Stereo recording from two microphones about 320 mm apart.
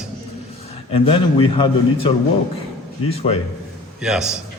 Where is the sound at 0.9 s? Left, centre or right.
Centre.